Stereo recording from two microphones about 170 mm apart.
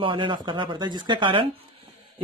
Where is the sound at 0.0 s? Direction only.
30° right (ahead or behind).